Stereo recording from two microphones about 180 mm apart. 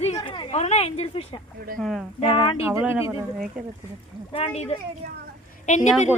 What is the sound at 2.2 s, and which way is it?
Speech, 30° left (ahead or behind).